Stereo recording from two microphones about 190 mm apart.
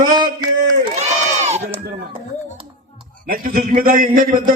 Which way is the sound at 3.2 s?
50° right (ahead or behind).